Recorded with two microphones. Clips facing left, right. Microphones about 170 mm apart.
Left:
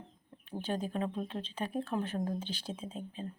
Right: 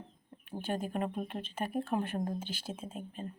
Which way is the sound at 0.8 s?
15° right (ahead or behind).